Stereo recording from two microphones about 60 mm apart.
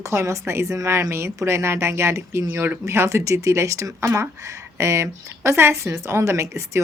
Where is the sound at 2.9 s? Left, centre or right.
Right.